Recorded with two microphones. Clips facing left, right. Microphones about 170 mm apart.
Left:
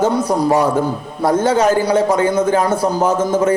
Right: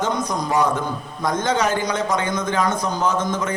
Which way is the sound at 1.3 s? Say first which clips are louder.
Left 7 dB; 10° left (ahead or behind).